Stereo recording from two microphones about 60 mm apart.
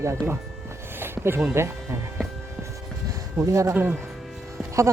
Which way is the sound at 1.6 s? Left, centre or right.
Right.